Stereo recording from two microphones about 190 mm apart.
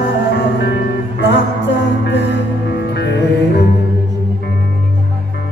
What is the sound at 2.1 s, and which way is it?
Music, 65° left (ahead or behind).